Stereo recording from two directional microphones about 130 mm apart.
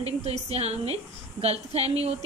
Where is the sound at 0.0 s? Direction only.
55° right (ahead or behind).